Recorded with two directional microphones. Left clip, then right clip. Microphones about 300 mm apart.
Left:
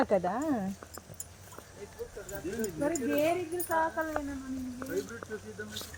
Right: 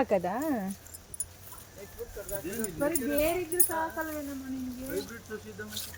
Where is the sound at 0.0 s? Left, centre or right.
Centre.